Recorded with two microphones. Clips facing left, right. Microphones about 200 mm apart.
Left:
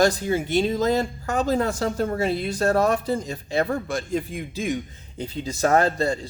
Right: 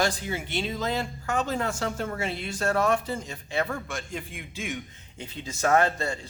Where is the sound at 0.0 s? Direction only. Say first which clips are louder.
Left 8 dB; 40° left (ahead or behind).